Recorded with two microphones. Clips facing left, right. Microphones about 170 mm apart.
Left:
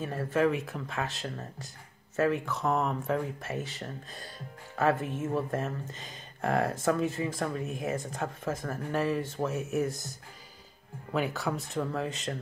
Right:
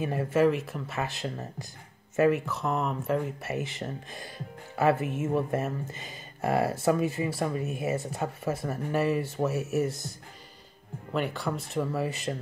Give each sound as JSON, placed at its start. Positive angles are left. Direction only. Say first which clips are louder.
{"t": 0.0, "sound": "speech", "louder": "right 3 dB", "side_deg": -10}
{"t": 1.2, "sound": "speech", "louder": "right 3 dB", "side_deg": -15}
{"t": 11.1, "sound": "speech", "louder": "even", "side_deg": 0}